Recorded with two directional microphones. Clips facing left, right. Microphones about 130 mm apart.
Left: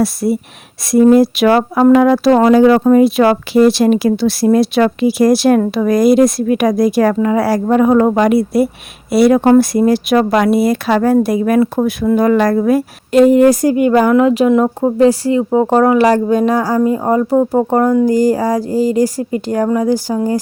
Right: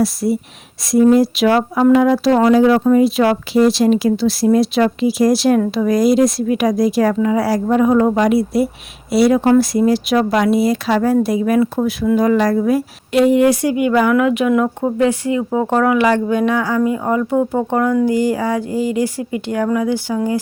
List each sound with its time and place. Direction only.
0.0 s speech: 60° left (ahead or behind); by 20.4 s 40° left (ahead or behind)